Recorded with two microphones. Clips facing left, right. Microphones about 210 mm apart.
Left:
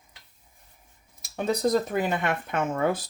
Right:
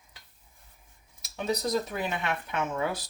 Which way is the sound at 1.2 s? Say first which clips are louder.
Left 5 dB; 50° left (ahead or behind).